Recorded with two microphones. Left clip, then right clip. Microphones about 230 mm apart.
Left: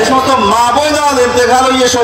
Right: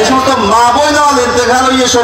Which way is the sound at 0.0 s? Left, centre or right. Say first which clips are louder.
Even; left.